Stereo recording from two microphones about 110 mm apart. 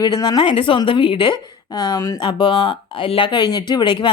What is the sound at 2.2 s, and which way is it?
Speech, 45° left (ahead or behind).